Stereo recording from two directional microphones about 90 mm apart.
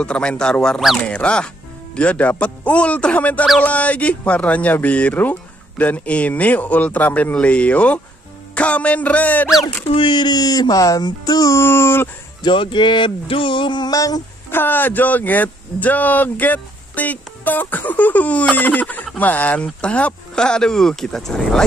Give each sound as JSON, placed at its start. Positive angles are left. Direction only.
{"t": 0.0, "sound": "speech", "side_deg": 10}
{"t": 9.8, "sound": "speech", "side_deg": 70}
{"t": 12.4, "sound": "speech", "side_deg": 65}
{"t": 13.9, "sound": "speech", "side_deg": 40}
{"t": 14.5, "sound": "speech", "side_deg": 20}